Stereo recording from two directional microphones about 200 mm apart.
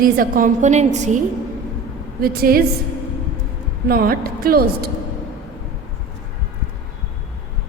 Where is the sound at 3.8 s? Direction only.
45° right (ahead or behind).